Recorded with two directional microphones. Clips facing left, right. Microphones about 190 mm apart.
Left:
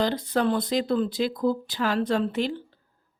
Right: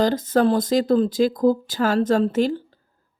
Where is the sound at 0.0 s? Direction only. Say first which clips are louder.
Right 6 dB; 45° right (ahead or behind).